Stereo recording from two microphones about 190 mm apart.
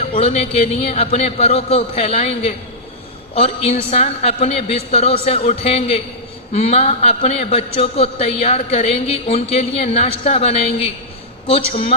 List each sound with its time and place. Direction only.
0.1 s a man's voice: 30° left (ahead or behind)